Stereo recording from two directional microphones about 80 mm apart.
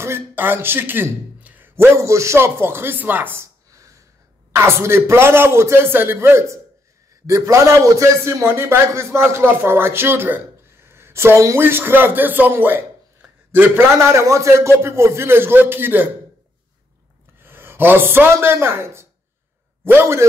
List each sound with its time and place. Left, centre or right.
0.0 s a man's voice: right
2.0 s a man's voice: right
4.5 s a man's voice: right
17.4 s a man's voice: right